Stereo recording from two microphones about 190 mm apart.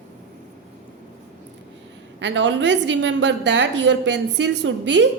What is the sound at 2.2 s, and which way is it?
A woman's voice, 70° right (ahead or behind).